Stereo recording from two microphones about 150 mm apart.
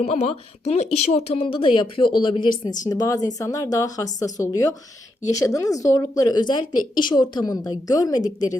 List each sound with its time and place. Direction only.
0.0 s speech: 45° left (ahead or behind); by 8.5 s 25° left (ahead or behind)